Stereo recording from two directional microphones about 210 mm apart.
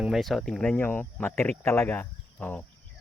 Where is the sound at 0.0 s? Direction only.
Centre (ahead or behind).